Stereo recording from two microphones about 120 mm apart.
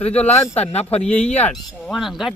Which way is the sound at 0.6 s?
60° left (ahead or behind).